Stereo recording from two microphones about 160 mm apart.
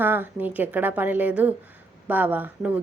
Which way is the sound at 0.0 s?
10° right (ahead or behind).